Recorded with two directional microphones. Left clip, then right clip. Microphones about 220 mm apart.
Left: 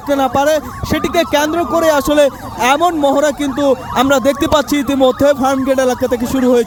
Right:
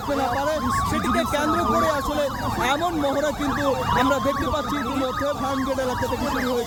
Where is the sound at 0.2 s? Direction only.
45° left (ahead or behind).